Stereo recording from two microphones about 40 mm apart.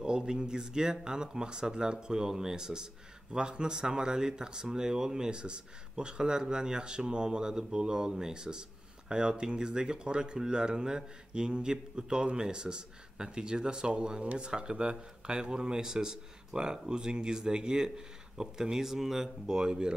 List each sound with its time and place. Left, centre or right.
0.0 s speech: centre
14.2 s speech: right
14.5 s speech: right